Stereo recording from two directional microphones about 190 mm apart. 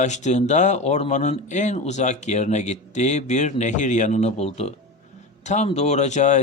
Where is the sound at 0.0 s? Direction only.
40° left (ahead or behind).